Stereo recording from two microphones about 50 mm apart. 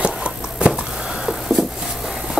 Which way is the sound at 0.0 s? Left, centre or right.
Centre.